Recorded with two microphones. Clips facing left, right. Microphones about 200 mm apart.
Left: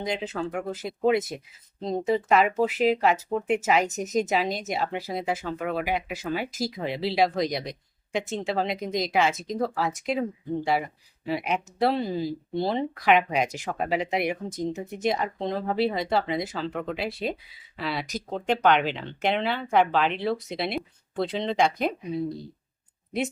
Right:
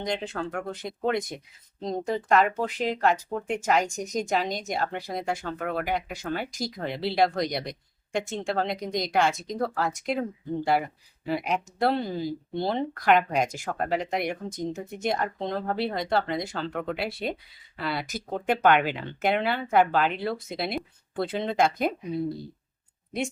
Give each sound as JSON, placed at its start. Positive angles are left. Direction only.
{"t": 0.0, "sound": "speech", "side_deg": 5}